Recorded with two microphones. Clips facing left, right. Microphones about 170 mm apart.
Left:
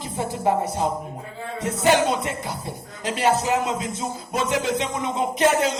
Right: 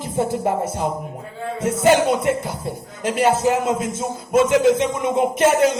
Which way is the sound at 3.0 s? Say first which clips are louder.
Right 3 dB; 50° right (ahead or behind).